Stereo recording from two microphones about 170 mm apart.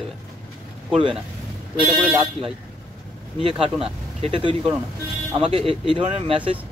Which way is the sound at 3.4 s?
30° right (ahead or behind).